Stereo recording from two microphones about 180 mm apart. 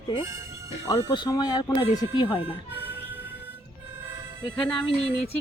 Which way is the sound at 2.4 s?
10° right (ahead or behind).